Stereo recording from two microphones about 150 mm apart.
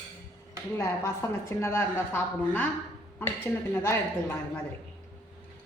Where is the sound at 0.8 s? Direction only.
20° left (ahead or behind).